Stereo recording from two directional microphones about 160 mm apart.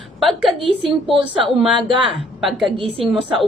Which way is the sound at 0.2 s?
Centre (ahead or behind).